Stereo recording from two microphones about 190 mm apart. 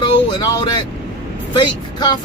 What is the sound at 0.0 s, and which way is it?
Vehicle, 25° left (ahead or behind).